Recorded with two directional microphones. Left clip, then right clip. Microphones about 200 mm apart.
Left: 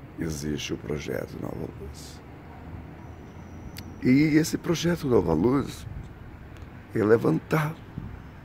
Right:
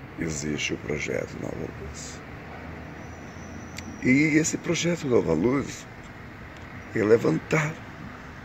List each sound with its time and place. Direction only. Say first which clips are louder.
0.2 s speech: right 3 dB; 10° left (ahead or behind)
3.7 s speech: right 1 dB; 20° left (ahead or behind)
6.9 s speech: right 1 dB; 15° left (ahead or behind)